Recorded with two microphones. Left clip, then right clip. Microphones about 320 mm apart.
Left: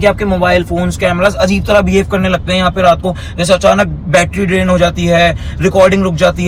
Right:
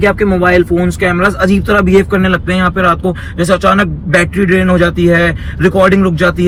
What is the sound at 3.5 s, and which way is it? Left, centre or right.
A man's voice, left.